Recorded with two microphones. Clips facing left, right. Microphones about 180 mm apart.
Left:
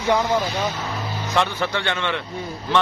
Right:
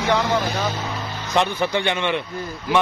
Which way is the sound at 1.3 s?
15° right (ahead or behind).